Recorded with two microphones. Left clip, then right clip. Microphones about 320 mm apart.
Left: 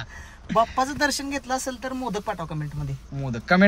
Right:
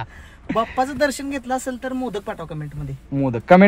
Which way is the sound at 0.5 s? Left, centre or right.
Centre.